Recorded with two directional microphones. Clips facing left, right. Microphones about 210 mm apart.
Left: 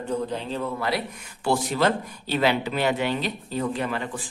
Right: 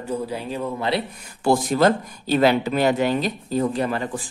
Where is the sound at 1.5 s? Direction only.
45° right (ahead or behind).